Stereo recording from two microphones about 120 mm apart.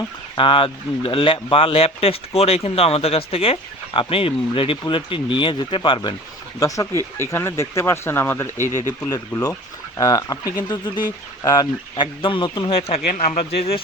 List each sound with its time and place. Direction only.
0.3 s speech: 45° left (ahead or behind)
6.6 s speech: 25° left (ahead or behind)
8.9 s speech: 30° left (ahead or behind); by 13.0 s 50° left (ahead or behind)
13.1 s speech: 65° left (ahead or behind)